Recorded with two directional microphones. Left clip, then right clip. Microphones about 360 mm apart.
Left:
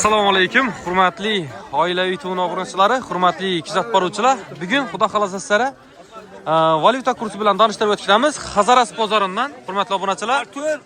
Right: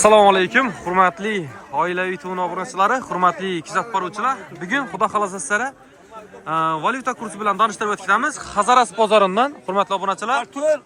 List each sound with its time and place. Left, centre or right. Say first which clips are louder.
0.0 s a man's voice: right 3 dB; centre
10.5 s speech: right 3 dB; right